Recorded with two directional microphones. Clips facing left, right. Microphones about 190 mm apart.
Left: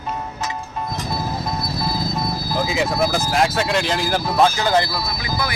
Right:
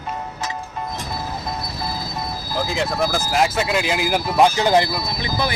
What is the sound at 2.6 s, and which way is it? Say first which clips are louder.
Speech: left 1 dB; 5° left (ahead or behind).